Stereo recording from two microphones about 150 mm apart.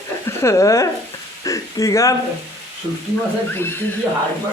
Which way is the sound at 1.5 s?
20° left (ahead or behind).